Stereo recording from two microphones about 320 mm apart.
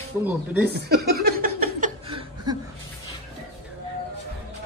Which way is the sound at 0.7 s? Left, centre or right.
Right.